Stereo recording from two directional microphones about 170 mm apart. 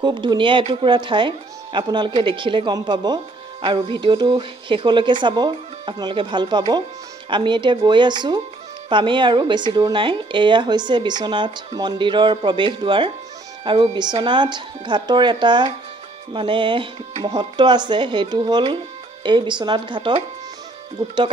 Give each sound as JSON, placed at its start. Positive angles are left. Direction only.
{"t": 0.0, "sound": "speech", "side_deg": -25}